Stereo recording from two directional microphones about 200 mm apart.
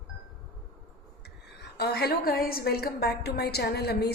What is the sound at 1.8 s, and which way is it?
A woman's voice, 55° left (ahead or behind).